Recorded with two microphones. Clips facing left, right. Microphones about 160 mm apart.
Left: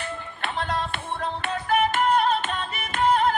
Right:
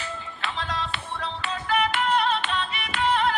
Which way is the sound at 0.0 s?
55° left (ahead or behind).